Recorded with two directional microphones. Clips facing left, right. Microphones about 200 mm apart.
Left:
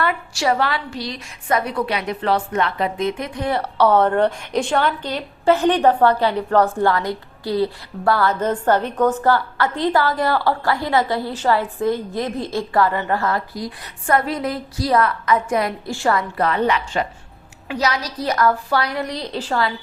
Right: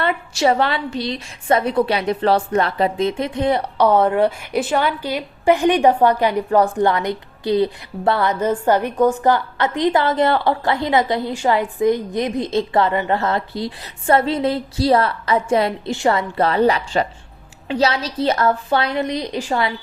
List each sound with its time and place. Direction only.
0.0 s a woman's voice: 25° right (ahead or behind)
16.4 s a woman's voice: 30° right (ahead or behind)